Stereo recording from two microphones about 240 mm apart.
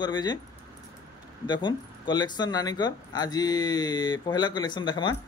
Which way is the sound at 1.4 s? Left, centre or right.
Centre.